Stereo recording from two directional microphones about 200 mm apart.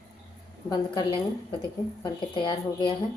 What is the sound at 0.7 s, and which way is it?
A woman's voice, 25° left (ahead or behind).